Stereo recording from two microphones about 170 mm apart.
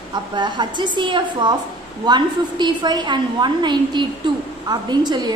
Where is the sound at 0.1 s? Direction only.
25° right (ahead or behind).